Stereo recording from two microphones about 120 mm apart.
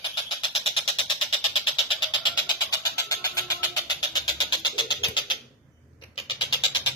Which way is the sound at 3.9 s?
35° left (ahead or behind).